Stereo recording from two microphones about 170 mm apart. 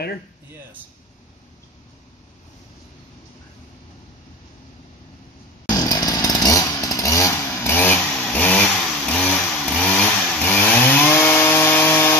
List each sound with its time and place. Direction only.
5.7 s chainsaw: 20° left (ahead or behind)